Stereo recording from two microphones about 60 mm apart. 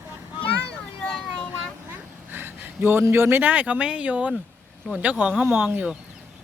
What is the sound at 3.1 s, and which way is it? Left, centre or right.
Speech, right.